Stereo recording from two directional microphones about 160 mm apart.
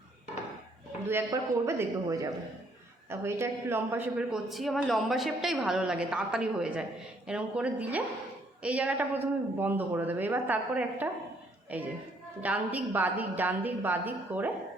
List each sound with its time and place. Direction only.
1.0 s a man's voice: 15° right (ahead or behind)